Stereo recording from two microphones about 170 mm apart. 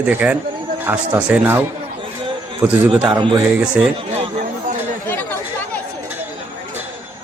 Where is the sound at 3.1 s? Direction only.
25° right (ahead or behind).